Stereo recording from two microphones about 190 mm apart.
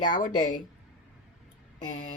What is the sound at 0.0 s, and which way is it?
Speech, 45° left (ahead or behind).